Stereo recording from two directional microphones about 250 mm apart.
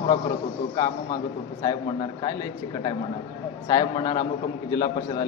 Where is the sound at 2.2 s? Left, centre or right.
Centre.